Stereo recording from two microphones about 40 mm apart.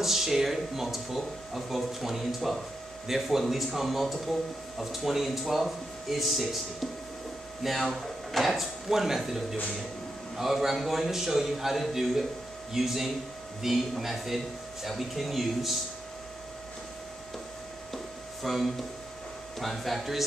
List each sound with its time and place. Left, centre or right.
0.0 s speech: centre
17.9 s a sound: centre
19.6 s speech: centre